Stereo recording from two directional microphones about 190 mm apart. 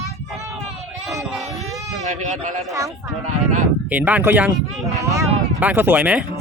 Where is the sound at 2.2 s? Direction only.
40° right (ahead or behind).